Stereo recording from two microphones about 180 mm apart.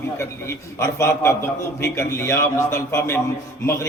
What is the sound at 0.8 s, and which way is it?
A man's voice, 15° left (ahead or behind).